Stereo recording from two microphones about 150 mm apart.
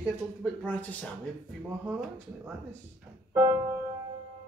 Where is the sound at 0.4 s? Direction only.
10° left (ahead or behind).